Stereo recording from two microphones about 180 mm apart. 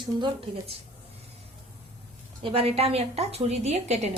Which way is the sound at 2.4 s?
30° right (ahead or behind).